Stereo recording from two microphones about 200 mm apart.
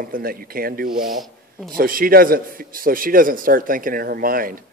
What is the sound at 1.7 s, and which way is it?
A man's voice, 45° right (ahead or behind).